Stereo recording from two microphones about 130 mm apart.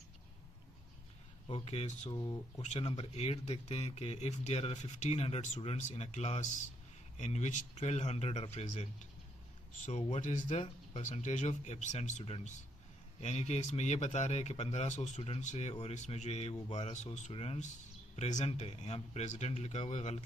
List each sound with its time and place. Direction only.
1.5 s speech: 50° left (ahead or behind)
2.1 s speech: 30° left (ahead or behind)
2.6 s speech: 55° left (ahead or behind)
9.8 s speech: 60° left (ahead or behind)
11.0 s speech: 70° left (ahead or behind); by 20.2 s 55° left (ahead or behind)